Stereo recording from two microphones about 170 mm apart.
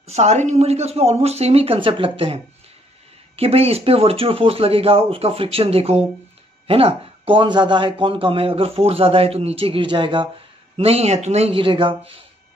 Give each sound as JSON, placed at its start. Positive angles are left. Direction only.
{"t": 0.0, "sound": "speech", "side_deg": -40}